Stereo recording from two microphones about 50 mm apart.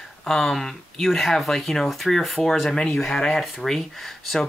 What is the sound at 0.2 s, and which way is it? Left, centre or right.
Speech, centre.